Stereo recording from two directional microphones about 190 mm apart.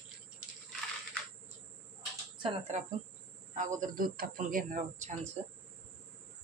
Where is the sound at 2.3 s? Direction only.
30° right (ahead or behind).